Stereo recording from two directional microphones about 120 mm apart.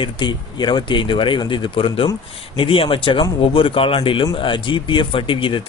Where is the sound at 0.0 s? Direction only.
40° left (ahead or behind).